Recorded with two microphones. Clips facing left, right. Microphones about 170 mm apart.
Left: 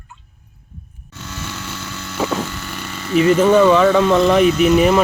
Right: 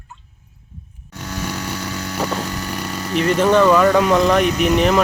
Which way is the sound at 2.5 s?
40° right (ahead or behind).